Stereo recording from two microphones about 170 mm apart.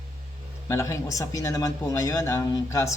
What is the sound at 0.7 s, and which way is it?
A man's voice, 15° left (ahead or behind).